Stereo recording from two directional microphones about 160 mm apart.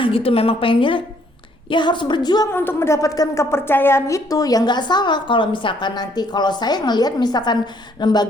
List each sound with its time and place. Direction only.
0.0 s a woman's voice: 35° left (ahead or behind)
2.5 s a woman's voice: 15° left (ahead or behind)